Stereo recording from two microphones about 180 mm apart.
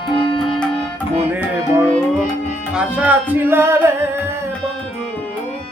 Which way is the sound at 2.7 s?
5° right (ahead or behind).